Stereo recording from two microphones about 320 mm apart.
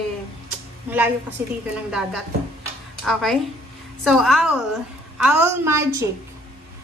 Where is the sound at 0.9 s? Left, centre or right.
Centre.